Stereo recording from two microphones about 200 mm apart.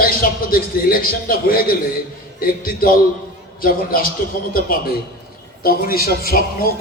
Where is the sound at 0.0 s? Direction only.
45° left (ahead or behind).